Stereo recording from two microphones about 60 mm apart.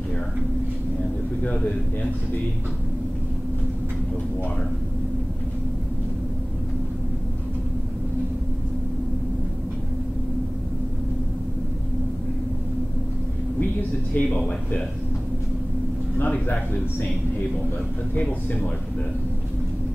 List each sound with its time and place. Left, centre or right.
13.6 s a man's voice: left
16.2 s speech: left
16.5 s a man's voice: left
18.1 s a man's voice: left